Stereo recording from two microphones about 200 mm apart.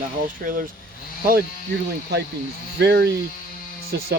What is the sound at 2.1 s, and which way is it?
Speech, 55° right (ahead or behind).